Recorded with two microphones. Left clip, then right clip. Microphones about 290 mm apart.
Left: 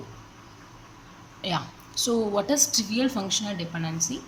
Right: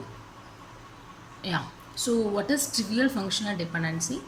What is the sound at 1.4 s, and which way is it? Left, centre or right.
A woman's voice, centre.